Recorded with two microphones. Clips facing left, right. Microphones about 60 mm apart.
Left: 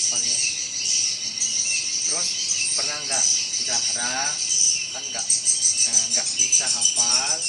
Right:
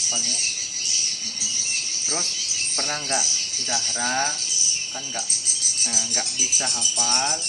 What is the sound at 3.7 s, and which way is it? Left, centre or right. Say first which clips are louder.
Cricket: right 4 dB; centre.